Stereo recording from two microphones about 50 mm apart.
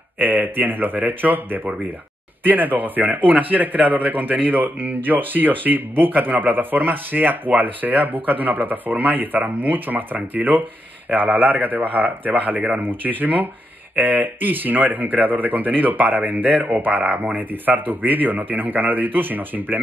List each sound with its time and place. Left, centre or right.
0.2 s a man's voice: right